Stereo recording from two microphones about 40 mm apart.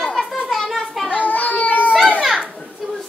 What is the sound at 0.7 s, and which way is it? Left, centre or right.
Children playing, centre.